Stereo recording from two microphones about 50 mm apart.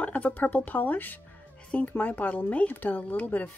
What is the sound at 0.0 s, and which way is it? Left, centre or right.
Speech, left.